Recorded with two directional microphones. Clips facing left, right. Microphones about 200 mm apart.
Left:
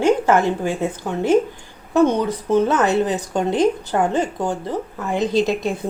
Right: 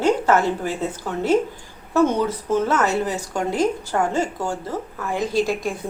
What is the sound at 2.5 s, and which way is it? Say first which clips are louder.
A woman's voice: left 4 dB; 20° left (ahead or behind).